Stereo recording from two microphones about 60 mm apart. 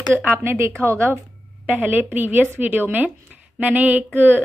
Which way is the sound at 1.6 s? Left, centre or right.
Right.